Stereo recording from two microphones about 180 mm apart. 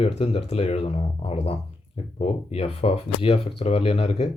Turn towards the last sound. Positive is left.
turn(degrees=35)  # may be behind; listen again after turning